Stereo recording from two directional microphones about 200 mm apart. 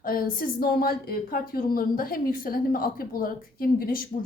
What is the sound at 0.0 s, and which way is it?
A woman's voice, 45° left (ahead or behind).